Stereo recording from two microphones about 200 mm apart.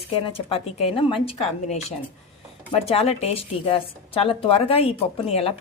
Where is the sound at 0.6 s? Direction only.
30° left (ahead or behind).